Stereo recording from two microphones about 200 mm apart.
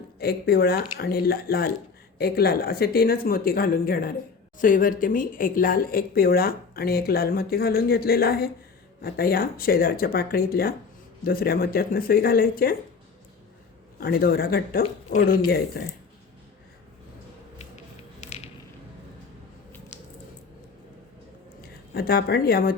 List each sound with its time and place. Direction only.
0.2 s speech: 50° left (ahead or behind)
14.0 s speech: 50° left (ahead or behind)
21.6 s speech: 50° left (ahead or behind)